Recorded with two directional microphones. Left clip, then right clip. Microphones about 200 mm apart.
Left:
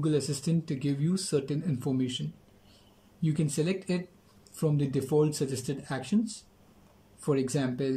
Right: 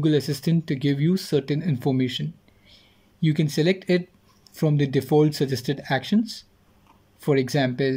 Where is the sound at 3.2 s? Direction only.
20° right (ahead or behind).